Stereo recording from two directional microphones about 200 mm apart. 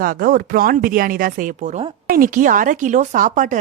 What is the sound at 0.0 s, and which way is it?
Speech, 45° right (ahead or behind).